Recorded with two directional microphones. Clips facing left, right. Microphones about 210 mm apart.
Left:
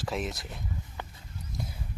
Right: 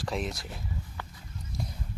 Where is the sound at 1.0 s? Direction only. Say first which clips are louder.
Left 1 dB; 20° left (ahead or behind).